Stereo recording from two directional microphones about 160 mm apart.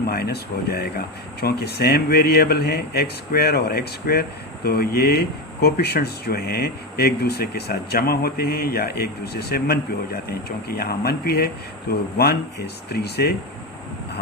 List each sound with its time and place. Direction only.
0.1 s speech: 75° left (ahead or behind)